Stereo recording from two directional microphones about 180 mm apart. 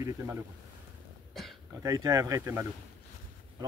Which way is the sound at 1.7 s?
20° right (ahead or behind).